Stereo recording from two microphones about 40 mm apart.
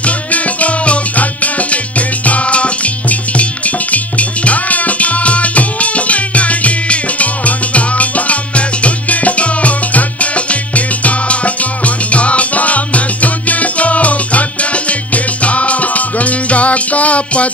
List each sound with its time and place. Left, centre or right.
0.0 s music: left